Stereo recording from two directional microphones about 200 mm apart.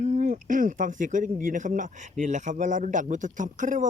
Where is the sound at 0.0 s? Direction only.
40° right (ahead or behind).